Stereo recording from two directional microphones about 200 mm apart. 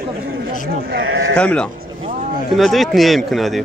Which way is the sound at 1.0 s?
80° right.